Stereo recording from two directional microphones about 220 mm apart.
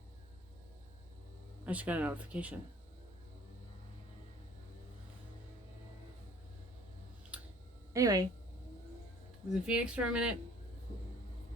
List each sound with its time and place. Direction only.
1.6 s speech: 5° right (ahead or behind)
7.3 s clicking: 5° right (ahead or behind)
7.9 s speech: 15° right (ahead or behind)
9.5 s speech: 5° right (ahead or behind)